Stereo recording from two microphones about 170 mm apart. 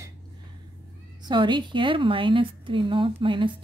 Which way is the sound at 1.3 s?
25° right (ahead or behind).